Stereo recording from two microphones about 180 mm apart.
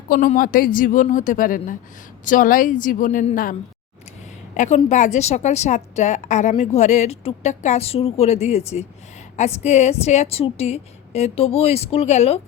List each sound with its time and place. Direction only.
0.1 s a woman's voice: 50° left (ahead or behind)
4.5 s a woman's voice: 45° left (ahead or behind)